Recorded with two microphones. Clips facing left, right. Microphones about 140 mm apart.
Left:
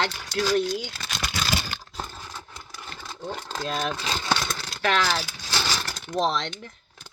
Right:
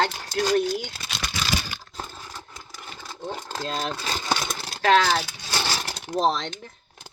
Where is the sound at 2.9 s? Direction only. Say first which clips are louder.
Right 1 dB; 15° right (ahead or behind).